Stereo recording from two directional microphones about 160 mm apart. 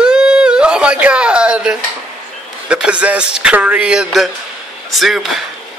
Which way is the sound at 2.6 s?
5° right (ahead or behind).